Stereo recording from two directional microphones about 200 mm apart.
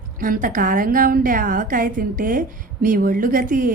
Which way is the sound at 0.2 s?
45° right (ahead or behind).